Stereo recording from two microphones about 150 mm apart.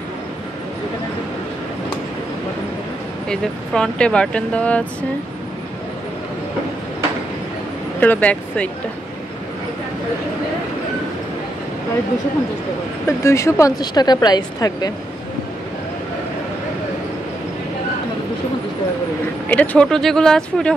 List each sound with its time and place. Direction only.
3.3 s speech: 5° left (ahead or behind)
8.0 s speech: 10° left (ahead or behind)
13.0 s a woman's voice: 20° left (ahead or behind)
19.5 s speech: 10° left (ahead or behind)